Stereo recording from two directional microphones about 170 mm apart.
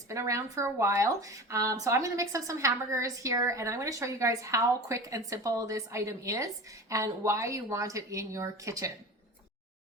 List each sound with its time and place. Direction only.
0.1 s a woman's voice: 20° right (ahead or behind)